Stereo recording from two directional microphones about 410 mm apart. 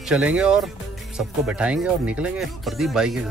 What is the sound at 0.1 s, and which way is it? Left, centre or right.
Speech, centre.